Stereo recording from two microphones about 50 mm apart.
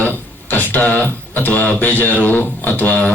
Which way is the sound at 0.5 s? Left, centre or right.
Left.